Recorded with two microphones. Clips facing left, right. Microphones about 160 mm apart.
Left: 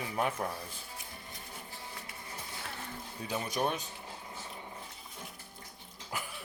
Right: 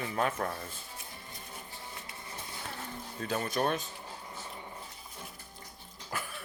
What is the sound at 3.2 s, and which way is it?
Speech, 10° left (ahead or behind).